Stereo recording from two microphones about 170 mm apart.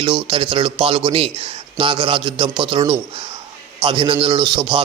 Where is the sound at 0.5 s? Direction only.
30° right (ahead or behind).